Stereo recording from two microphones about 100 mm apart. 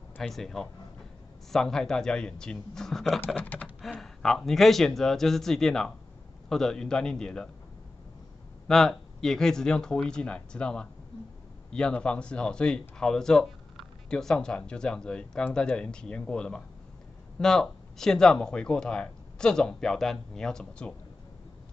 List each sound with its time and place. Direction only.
0.2 s speech: 5° left (ahead or behind)
3.3 s speech: 15° left (ahead or behind)
3.8 s speech: 5° left (ahead or behind)
8.6 s speech: 5° left (ahead or behind)